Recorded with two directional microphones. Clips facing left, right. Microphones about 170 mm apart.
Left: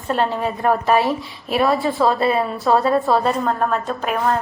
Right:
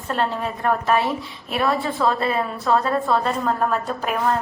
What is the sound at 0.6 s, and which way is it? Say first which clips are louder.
Speech: left 3 dB; 20° left (ahead or behind).